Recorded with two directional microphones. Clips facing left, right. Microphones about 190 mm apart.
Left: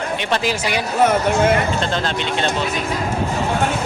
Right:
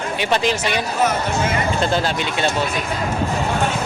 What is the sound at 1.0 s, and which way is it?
Speech, 55° left (ahead or behind).